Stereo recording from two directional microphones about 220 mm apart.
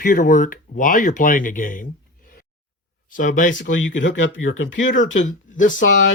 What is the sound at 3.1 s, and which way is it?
Speech, 35° left (ahead or behind).